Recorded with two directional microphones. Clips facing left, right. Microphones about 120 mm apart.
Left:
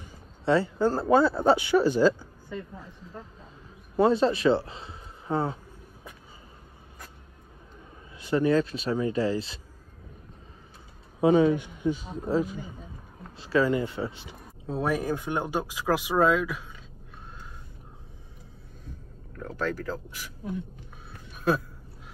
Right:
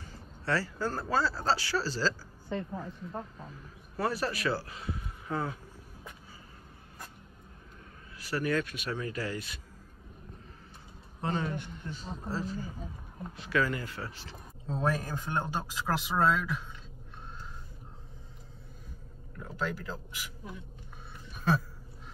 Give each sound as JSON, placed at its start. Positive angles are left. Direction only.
{"t": 0.1, "sound": "speech", "side_deg": 20}
{"t": 3.9, "sound": "speech", "side_deg": 20}
{"t": 8.2, "sound": "speech", "side_deg": 20}
{"t": 11.1, "sound": "speech", "side_deg": 5}
{"t": 13.4, "sound": "speech", "side_deg": 30}
{"t": 19.6, "sound": "speech", "side_deg": -15}
{"t": 21.1, "sound": "a sound", "side_deg": 0}